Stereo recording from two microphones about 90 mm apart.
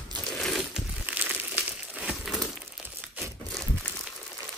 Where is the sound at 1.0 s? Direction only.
20° right (ahead or behind).